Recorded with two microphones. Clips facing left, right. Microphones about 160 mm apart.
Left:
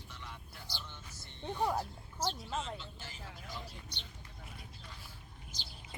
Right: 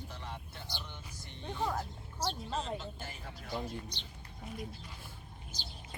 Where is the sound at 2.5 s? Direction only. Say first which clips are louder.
Right 2 dB; 35° right (ahead or behind).